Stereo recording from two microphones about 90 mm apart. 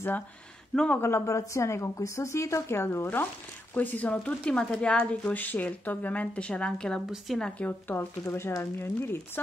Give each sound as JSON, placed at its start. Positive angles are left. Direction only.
{"t": 0.9, "sound": "a woman's voice", "side_deg": 30}
{"t": 8.3, "sound": "speech", "side_deg": 35}